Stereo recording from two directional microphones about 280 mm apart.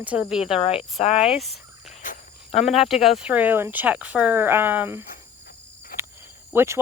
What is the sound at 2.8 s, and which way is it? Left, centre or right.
Speech, centre.